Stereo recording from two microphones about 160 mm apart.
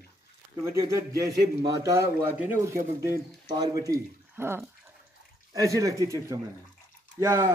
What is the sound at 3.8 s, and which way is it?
A man's voice, 20° right (ahead or behind).